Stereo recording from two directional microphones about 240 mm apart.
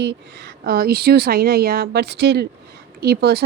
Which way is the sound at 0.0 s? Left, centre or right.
Right.